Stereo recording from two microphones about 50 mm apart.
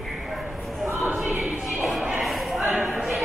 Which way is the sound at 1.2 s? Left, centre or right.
Right.